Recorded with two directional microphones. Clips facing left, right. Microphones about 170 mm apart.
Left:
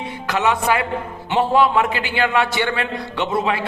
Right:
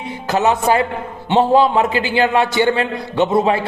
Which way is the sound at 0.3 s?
35° right (ahead or behind).